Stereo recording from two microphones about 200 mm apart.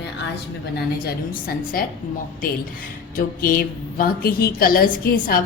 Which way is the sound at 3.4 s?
45° left (ahead or behind).